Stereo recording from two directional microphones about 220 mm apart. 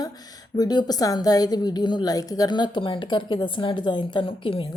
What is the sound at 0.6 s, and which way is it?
A woman's voice, 20° left (ahead or behind).